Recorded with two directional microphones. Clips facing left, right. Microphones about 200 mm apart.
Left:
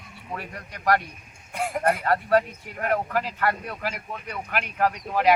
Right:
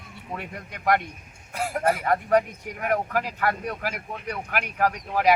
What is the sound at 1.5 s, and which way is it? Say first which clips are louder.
Speech: even; 5° right (ahead or behind).